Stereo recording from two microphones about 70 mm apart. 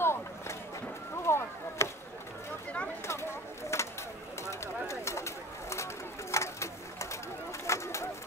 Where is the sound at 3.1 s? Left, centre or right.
Left.